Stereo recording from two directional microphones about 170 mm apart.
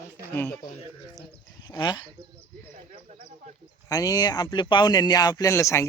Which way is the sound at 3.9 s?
20° left (ahead or behind).